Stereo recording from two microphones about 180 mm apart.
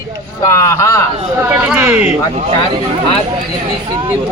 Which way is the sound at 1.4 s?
10° right (ahead or behind).